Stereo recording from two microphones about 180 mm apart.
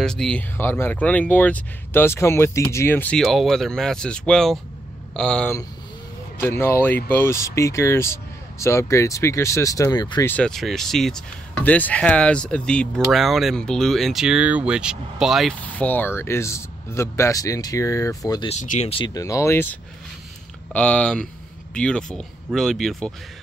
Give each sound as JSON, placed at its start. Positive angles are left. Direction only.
{"t": 0.0, "sound": "speech", "side_deg": 5}
{"t": 10.3, "sound": "speech", "side_deg": 5}
{"t": 18.5, "sound": "speech", "side_deg": 40}